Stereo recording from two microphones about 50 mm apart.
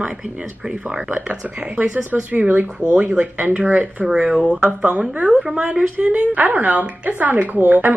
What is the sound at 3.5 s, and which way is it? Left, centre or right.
Speech, right.